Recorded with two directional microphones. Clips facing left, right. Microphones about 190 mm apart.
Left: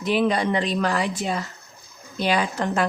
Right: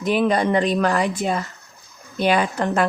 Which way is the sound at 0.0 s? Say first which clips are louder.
Right 2 dB; 50° right (ahead or behind).